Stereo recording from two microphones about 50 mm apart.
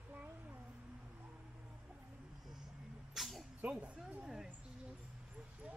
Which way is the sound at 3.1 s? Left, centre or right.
Centre.